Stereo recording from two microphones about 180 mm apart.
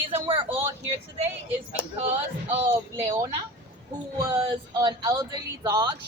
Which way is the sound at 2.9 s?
15° right (ahead or behind).